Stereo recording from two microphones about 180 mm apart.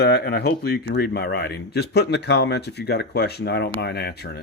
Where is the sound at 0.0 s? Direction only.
60° left (ahead or behind).